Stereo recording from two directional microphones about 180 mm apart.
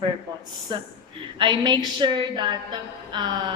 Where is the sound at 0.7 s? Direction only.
25° right (ahead or behind).